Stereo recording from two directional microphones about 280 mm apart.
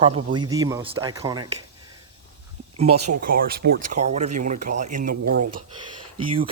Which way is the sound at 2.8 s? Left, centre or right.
Right.